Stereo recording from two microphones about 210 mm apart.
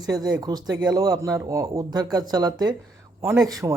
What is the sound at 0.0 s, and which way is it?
Speech, 20° right (ahead or behind).